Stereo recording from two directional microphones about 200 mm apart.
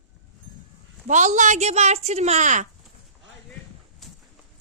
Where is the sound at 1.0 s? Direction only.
40° right (ahead or behind).